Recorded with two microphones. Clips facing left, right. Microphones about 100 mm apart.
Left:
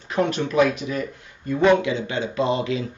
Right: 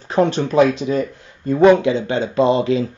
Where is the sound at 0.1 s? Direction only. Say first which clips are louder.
Right 6 dB; 30° right (ahead or behind).